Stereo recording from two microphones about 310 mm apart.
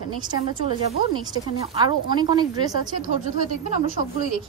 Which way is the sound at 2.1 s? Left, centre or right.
Centre.